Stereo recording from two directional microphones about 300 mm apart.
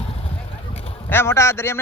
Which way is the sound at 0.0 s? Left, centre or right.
Centre.